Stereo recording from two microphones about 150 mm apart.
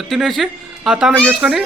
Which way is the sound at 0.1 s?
Centre (ahead or behind).